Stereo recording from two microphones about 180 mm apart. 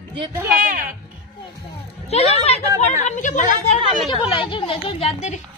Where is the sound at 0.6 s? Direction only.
50° right (ahead or behind).